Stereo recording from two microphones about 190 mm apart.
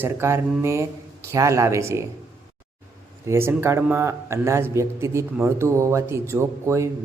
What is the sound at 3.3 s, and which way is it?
Speech, 10° right (ahead or behind).